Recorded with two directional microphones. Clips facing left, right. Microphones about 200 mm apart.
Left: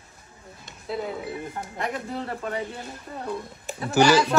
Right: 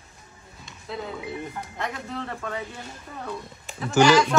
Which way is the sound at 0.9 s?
5° left (ahead or behind).